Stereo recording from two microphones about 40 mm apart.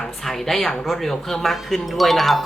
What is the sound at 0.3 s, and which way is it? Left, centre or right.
Speech, centre.